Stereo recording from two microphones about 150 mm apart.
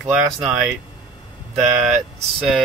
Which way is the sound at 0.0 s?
5° right (ahead or behind).